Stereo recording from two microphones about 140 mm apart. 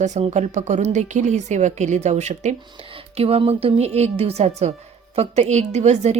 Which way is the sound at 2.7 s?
40° right (ahead or behind).